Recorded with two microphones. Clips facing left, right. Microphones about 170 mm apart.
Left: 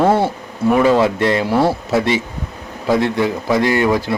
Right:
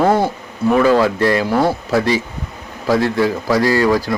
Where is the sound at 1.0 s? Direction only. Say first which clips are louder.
Even; 25° left (ahead or behind).